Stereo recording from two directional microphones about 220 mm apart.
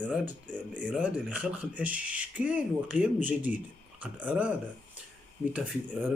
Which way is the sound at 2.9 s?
35° left (ahead or behind).